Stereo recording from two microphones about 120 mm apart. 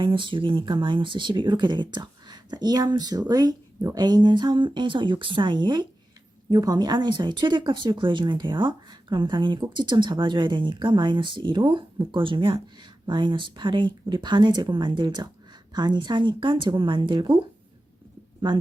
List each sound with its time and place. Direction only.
0.0 s speech: 45° right (ahead or behind)
18.4 s speech: 40° right (ahead or behind)